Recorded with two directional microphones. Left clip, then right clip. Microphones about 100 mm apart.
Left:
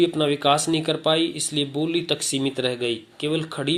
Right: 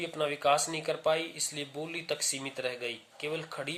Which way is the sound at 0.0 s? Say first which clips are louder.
Left 10 dB; 20° left (ahead or behind).